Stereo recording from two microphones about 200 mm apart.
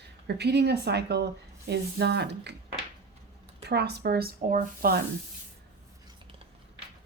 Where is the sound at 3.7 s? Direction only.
55° right (ahead or behind).